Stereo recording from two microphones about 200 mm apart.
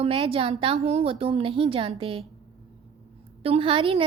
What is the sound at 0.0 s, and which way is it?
Speech, 30° right (ahead or behind).